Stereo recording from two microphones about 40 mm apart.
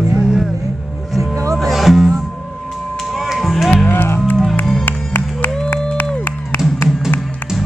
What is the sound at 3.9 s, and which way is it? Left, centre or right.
Music, left.